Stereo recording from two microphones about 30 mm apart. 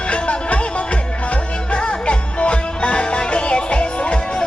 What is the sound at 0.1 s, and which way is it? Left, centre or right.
Music, left.